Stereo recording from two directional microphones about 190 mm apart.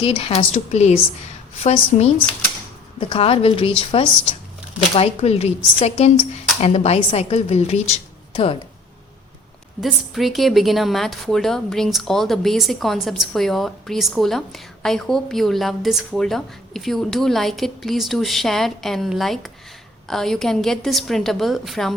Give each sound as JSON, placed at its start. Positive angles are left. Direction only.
{"t": 0.0, "sound": "a woman's voice", "side_deg": 30}
{"t": 9.8, "sound": "a woman's voice", "side_deg": 0}